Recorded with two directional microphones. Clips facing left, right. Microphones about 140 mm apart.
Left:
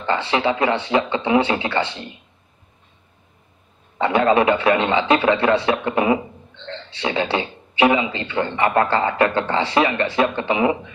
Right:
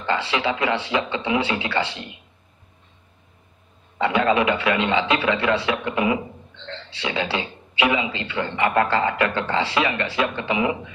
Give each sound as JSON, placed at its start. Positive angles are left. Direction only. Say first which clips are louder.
{"t": 0.0, "sound": "speech", "louder": "left 3 dB", "side_deg": 30}
{"t": 4.0, "sound": "a man's voice", "louder": "left 3 dB", "side_deg": 30}